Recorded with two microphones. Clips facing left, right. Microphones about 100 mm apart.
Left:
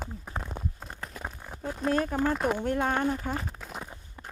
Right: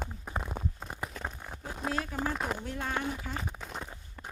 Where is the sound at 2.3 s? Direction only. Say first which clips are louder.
Left 7 dB; centre (ahead or behind).